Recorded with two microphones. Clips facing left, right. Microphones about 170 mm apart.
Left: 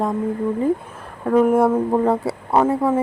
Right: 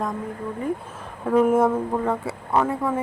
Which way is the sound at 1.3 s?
Centre (ahead or behind).